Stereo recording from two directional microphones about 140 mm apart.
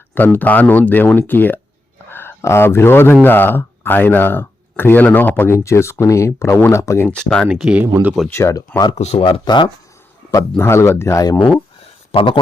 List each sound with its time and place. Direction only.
0.1 s speech: 15° left (ahead or behind)
7.2 s speech: 5° left (ahead or behind)
7.4 s speech: 5° right (ahead or behind)
8.3 s speech: 20° left (ahead or behind)
9.0 s speech: 45° left (ahead or behind)
10.6 s speech: 20° left (ahead or behind)
12.1 s speech: 40° left (ahead or behind)